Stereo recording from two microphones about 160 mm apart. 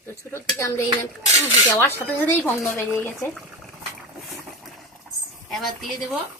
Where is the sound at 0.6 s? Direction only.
20° left (ahead or behind).